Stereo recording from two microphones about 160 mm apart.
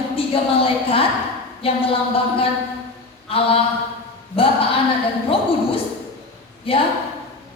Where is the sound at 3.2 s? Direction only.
35° left (ahead or behind).